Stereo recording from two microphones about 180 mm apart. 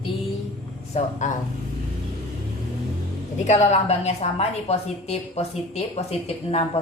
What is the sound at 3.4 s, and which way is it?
A woman's voice, 40° left (ahead or behind).